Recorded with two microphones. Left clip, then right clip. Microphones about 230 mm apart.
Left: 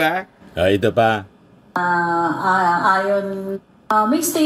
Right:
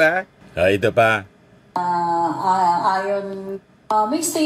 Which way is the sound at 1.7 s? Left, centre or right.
Centre.